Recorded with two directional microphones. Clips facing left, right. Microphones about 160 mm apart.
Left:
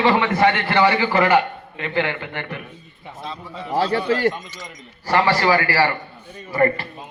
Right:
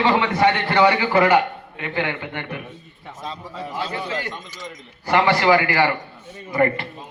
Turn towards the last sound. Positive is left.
turn(degrees=-20)  # may be behind; listen again after turning